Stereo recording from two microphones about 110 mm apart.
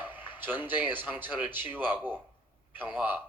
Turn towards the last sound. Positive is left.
turn(degrees=-15)  # may be behind; listen again after turning